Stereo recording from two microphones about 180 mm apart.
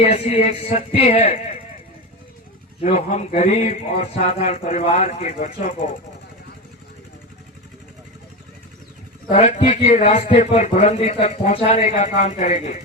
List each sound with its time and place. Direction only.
0.0 s a man's voice: 35° left (ahead or behind)
2.8 s a man's voice: 40° left (ahead or behind)
9.3 s a man's voice: 35° left (ahead or behind)